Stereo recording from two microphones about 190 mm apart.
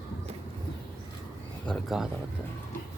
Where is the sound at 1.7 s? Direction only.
Centre (ahead or behind).